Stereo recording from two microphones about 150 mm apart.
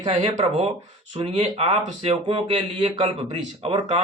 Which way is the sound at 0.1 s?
45° right (ahead or behind).